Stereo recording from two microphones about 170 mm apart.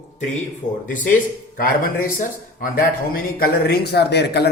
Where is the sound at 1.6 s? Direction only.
55° left (ahead or behind).